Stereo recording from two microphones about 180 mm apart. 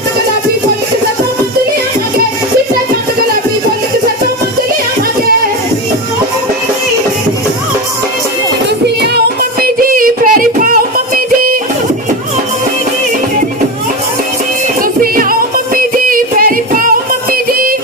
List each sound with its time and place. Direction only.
9.0 s music: 60° right (ahead or behind)
14.8 s music: 50° right (ahead or behind)